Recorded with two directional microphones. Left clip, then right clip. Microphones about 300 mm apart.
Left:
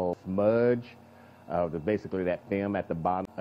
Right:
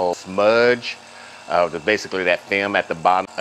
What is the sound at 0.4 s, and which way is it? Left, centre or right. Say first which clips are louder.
Speech: right 9 dB; centre.